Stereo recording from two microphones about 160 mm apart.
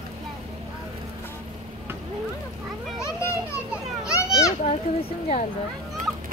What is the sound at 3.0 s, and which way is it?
Children playing, 20° left (ahead or behind).